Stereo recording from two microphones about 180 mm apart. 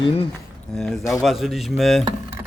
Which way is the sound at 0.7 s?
5° left (ahead or behind).